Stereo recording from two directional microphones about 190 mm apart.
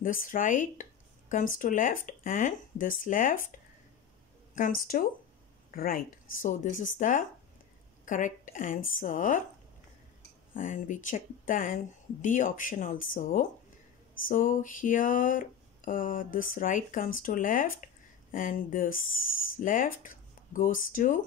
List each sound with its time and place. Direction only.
0.0 s speech: 45° left (ahead or behind)
5.8 s speech: 50° left (ahead or behind)
10.5 s speech: 45° left (ahead or behind)